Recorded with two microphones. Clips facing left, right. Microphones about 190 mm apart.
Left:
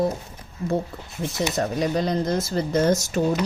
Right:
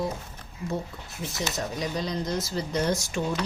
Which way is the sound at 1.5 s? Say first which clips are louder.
Left 8 dB; 55° left (ahead or behind).